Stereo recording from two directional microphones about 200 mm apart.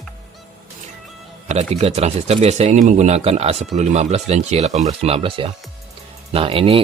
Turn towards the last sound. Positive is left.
turn(degrees=-30)  # may be behind; listen again after turning